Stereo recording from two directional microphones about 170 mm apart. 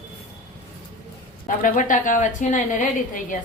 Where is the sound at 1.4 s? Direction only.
50° left (ahead or behind).